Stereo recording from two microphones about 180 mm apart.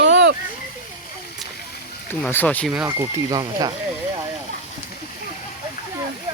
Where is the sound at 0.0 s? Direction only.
75° right (ahead or behind).